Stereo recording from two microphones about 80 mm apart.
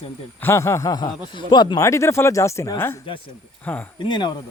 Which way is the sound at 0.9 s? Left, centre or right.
Left.